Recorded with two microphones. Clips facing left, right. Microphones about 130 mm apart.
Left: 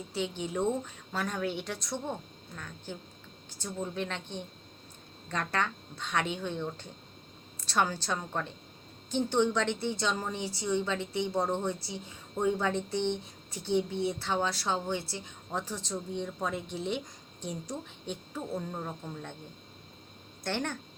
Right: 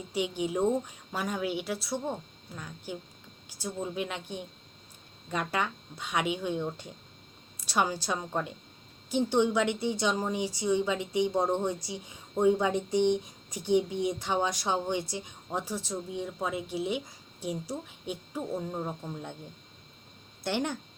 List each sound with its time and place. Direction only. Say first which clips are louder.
0.1 s a woman's voice: right 4 dB; 10° right (ahead or behind)
20.4 s a woman's voice: right 3 dB; 10° right (ahead or behind)